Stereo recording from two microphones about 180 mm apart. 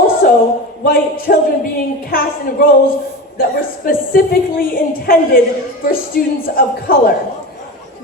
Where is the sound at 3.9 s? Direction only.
55° left (ahead or behind).